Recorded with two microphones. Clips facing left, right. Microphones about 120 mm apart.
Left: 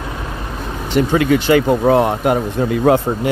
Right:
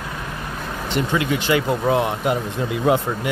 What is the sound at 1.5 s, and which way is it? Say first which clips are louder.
Speech: left 5 dB; 40° left (ahead or behind).